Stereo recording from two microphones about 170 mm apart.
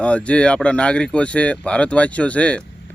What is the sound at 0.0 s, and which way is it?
Speech, 5° left (ahead or behind).